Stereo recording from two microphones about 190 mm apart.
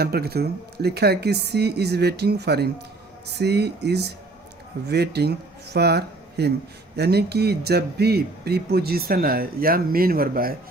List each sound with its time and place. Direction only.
0.0 s speech: 55° right (ahead or behind)